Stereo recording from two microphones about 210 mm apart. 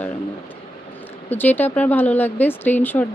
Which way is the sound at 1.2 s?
10° left (ahead or behind).